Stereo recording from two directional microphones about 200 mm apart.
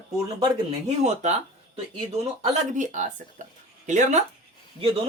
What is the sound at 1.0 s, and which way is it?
Speech, 35° right (ahead or behind).